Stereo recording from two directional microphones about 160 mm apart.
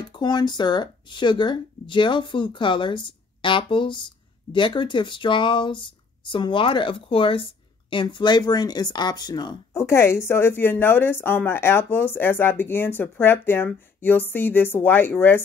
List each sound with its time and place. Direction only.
0.1 s speech: 25° left (ahead or behind)